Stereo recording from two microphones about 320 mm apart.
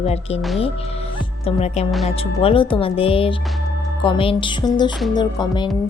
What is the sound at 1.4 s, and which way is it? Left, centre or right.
A woman's voice, centre.